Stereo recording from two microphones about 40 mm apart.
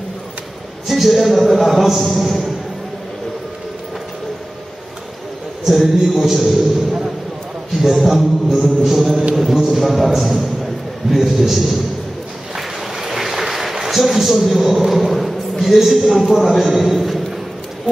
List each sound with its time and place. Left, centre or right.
0.8 s a man's voice: centre
5.7 s speech: centre
7.8 s a man's voice: centre
8.8 s a sound: centre
11.1 s a man's voice: centre
12.5 s a sound: centre
15.6 s a man's voice: centre